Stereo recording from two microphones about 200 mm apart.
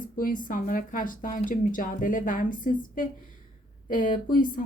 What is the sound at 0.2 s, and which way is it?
A woman's voice, 45° left (ahead or behind).